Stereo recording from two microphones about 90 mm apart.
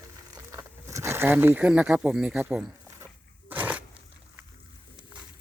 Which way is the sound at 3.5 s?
20° right (ahead or behind).